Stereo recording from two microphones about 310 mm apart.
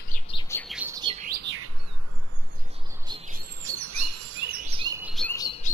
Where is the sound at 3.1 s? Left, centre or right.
Centre.